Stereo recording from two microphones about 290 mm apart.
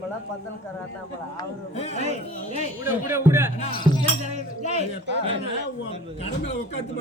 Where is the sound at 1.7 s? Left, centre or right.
Left.